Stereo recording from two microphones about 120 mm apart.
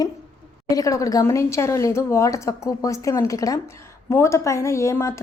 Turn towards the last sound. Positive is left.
turn(degrees=25)  # may be behind; listen again after turning